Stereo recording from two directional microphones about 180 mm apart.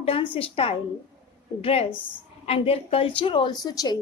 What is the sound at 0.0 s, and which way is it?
A woman's voice, 30° left (ahead or behind).